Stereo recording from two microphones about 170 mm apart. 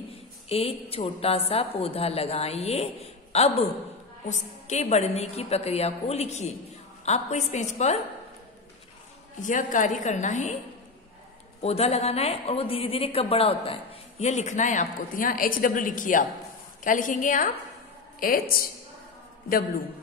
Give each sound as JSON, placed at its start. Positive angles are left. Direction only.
{"t": 0.5, "sound": "a woman's voice", "side_deg": 35}
{"t": 9.4, "sound": "a woman's voice", "side_deg": 50}
{"t": 11.6, "sound": "a woman's voice", "side_deg": 35}